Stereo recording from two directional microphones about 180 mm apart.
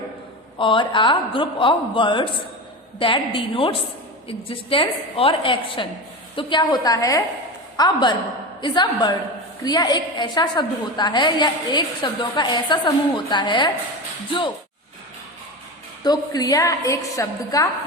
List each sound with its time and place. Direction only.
0.6 s a woman's voice: 30° left (ahead or behind)
16.0 s a woman's voice: 20° left (ahead or behind)